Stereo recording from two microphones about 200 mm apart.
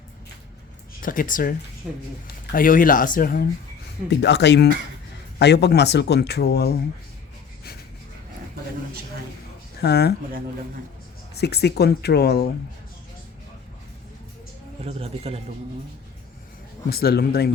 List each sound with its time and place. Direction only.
1.0 s speech: 45° left (ahead or behind)
1.8 s speech: 5° right (ahead or behind)
2.2 s speech: 45° left (ahead or behind)
4.1 s speech: 60° left (ahead or behind)
9.8 s speech: 55° left (ahead or behind)
11.3 s speech: 55° left (ahead or behind)
14.8 s speech: 30° right (ahead or behind)
16.9 s speech: 50° left (ahead or behind)